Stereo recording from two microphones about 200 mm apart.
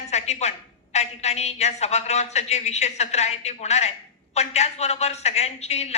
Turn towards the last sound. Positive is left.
turn(degrees=30)  # may be behind; listen again after turning